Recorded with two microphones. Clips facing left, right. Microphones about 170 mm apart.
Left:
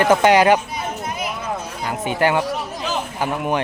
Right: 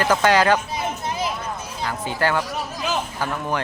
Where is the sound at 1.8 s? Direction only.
20° left (ahead or behind).